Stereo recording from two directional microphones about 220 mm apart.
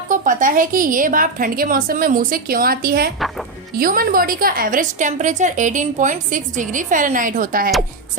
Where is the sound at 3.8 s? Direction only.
40° right (ahead or behind).